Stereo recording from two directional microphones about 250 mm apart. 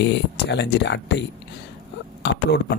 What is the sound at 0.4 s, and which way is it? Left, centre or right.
Speech, left.